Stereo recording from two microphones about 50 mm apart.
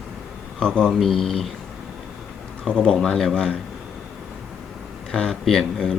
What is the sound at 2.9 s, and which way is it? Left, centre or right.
Speech, centre.